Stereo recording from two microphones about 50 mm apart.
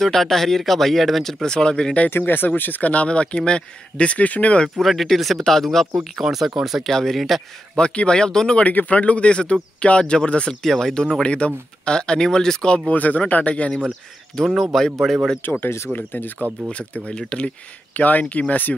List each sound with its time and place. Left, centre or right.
0.0 s speech: centre
2.0 s speech: left
4.7 s speech: centre
6.1 s speech: centre
6.9 s speech: centre
7.7 s speech: left
11.2 s speech: left
12.9 s speech: left
14.6 s speech: centre
15.4 s speech: left
16.7 s speech: left
17.9 s speech: left